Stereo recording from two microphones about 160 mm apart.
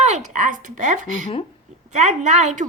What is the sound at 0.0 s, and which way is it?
A child's voice, 50° right (ahead or behind).